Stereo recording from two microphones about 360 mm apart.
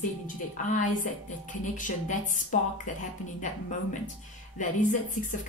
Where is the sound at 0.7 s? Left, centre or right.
Left.